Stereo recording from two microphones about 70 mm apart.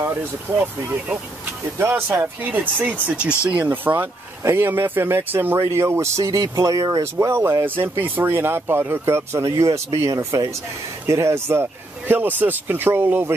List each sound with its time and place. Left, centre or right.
1.8 s speech: right
3.9 s speech: right
5.6 s speech: right
7.0 s speech: right
11.1 s speech: right
12.1 s speech: right